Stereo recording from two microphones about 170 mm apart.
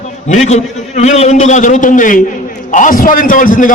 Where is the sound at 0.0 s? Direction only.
45° left (ahead or behind).